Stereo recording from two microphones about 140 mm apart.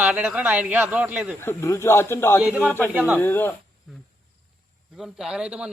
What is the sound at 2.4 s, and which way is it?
Speech, 10° right (ahead or behind).